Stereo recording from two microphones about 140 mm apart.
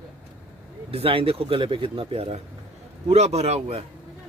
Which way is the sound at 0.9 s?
40° right (ahead or behind).